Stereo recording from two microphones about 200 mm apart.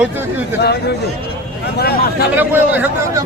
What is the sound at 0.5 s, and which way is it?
Speech, 55° left (ahead or behind).